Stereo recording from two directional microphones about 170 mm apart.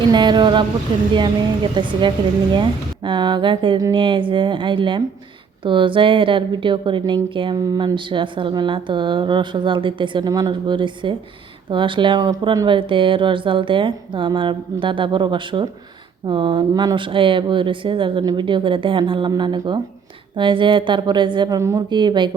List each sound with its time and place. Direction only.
0.1 s speech: 25° right (ahead or behind)
1.7 s speech: 30° right (ahead or behind)